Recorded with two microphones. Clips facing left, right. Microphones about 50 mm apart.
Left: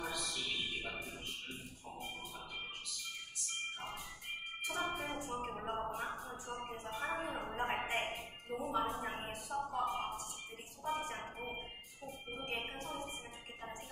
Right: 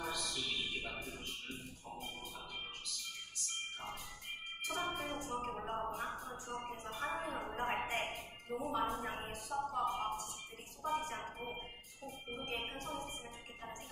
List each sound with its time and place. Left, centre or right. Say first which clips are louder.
0.0 s music: even; centre
4.6 s organ: left 1 dB; centre
4.8 s music: left 1 dB; left
5.3 s a sound: even; centre
5.9 s music: even; centre